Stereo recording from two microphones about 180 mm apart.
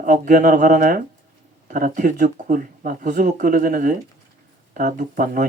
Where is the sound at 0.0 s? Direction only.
50° right (ahead or behind).